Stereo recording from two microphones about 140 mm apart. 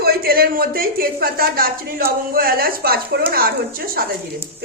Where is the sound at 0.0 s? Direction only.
90° right.